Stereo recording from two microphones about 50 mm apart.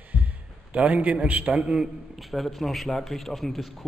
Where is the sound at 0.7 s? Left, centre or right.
Right.